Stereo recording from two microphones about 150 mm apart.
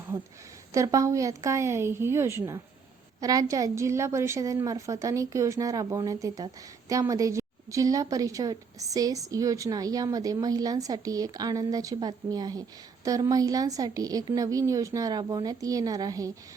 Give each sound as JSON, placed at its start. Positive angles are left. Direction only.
{"t": 0.7, "sound": "a woman's voice", "side_deg": -20}